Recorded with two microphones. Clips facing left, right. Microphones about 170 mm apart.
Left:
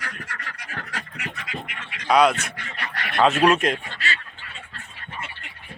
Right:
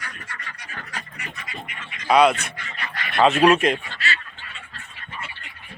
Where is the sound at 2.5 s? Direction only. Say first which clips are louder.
Even; 65° left (ahead or behind).